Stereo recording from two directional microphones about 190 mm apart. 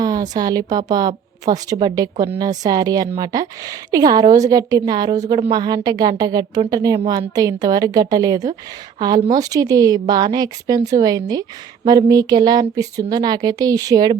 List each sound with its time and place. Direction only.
0.0 s a woman's voice: 20° right (ahead or behind)